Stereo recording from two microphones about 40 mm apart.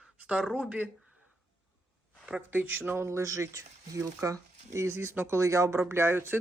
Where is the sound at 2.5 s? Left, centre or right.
Right.